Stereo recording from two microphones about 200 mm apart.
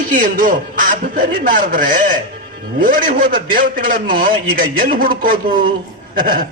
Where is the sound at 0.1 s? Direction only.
45° right (ahead or behind).